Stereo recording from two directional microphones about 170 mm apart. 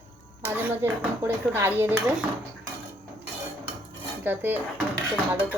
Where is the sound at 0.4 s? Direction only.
15° right (ahead or behind).